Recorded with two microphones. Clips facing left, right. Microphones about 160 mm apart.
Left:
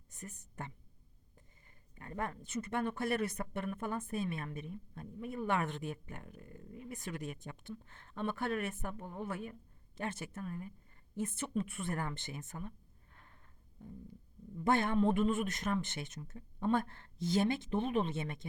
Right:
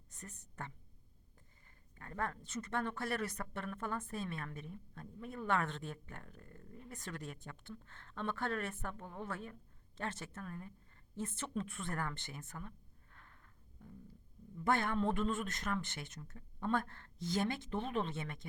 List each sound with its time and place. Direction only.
0.1 s a woman's voice: 10° left (ahead or behind)
2.0 s speech: 15° left (ahead or behind)
13.1 s music: 25° left (ahead or behind)
14.6 s a man's voice: 20° left (ahead or behind)